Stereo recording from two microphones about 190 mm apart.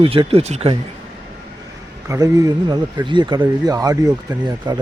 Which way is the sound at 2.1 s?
15° right (ahead or behind).